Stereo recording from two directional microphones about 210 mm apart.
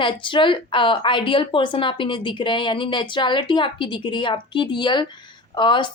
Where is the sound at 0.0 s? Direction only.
25° left (ahead or behind).